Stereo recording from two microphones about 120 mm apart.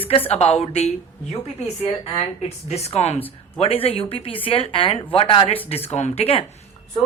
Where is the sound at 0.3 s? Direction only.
60° left (ahead or behind).